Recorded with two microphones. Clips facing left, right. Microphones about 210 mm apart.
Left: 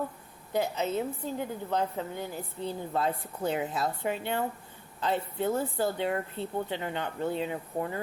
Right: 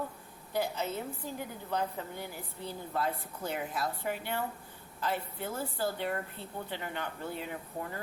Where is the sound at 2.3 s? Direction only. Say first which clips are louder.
Left 6 dB; 20° left (ahead or behind).